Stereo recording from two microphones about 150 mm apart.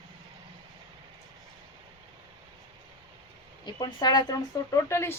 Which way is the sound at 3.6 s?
30° left (ahead or behind).